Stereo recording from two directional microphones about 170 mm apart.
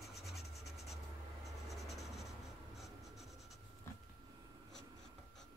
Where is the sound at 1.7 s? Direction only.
Centre (ahead or behind).